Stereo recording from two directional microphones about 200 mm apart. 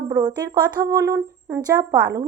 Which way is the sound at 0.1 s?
20° right (ahead or behind).